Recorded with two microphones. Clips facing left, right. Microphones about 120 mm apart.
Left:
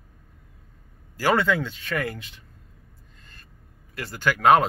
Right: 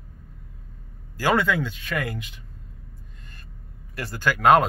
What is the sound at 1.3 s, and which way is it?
Speech, 25° left (ahead or behind).